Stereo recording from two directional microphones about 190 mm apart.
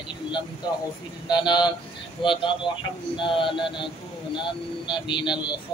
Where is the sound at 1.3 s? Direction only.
25° left (ahead or behind).